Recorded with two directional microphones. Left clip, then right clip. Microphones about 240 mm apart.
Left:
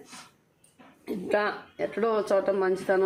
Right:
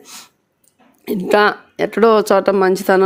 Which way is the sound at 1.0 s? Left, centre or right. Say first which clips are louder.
Right 14 dB; right.